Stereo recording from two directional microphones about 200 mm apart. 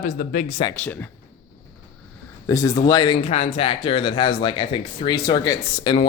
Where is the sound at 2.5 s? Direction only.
15° left (ahead or behind).